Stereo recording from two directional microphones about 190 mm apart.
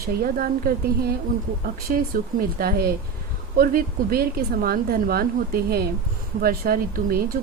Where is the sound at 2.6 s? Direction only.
55° right (ahead or behind).